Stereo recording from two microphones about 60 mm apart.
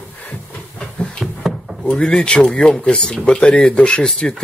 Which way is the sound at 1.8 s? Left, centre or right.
Centre.